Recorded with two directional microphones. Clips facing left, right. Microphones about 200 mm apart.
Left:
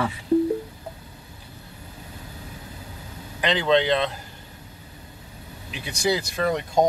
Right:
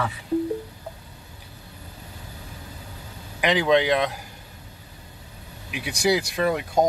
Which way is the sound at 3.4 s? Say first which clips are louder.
Right 1 dB; 10° right (ahead or behind).